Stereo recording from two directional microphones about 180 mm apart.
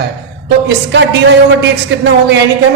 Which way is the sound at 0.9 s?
80° right.